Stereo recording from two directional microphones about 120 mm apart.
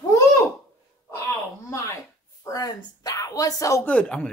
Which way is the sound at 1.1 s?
25° left (ahead or behind).